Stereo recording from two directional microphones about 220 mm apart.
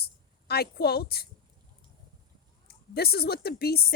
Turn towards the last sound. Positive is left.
turn(degrees=45)  # may be behind; listen again after turning